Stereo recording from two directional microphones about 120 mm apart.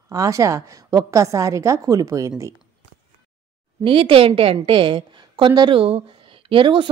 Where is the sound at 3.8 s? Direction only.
45° right (ahead or behind).